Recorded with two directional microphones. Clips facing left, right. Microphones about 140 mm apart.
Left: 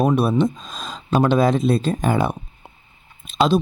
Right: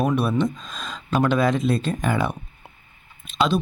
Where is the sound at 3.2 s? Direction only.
35° left (ahead or behind).